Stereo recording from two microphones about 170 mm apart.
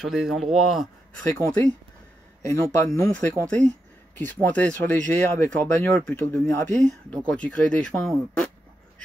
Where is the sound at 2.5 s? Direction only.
20° left (ahead or behind).